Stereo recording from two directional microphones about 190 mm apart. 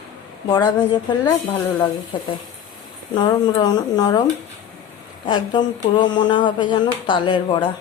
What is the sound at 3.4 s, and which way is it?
Speech, 20° left (ahead or behind).